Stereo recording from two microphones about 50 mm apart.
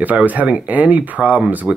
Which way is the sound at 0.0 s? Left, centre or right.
Right.